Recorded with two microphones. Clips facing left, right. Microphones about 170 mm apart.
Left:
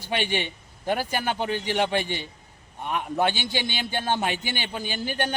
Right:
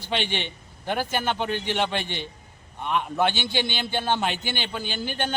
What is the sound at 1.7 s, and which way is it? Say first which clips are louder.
Speech: left 3 dB; 45° left (ahead or behind).